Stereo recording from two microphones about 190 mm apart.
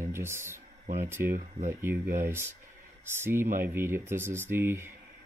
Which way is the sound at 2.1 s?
50° right (ahead or behind).